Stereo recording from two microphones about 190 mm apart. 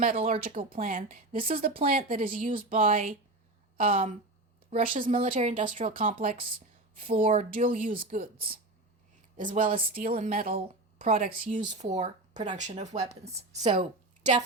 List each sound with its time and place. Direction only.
0.2 s speech: 30° right (ahead or behind)
0.4 s speech: 45° right (ahead or behind)